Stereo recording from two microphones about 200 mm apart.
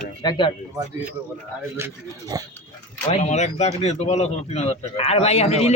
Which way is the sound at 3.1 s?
35° left (ahead or behind).